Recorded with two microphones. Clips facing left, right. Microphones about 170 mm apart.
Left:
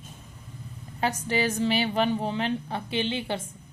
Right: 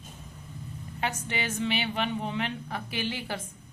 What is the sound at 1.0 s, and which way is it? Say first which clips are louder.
A woman's voice: left 6 dB; 35° left (ahead or behind).